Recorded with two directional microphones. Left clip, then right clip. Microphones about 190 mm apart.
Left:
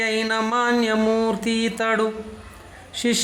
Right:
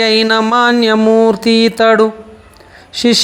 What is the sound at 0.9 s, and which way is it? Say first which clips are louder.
Speech: right 11 dB; 25° right (ahead or behind).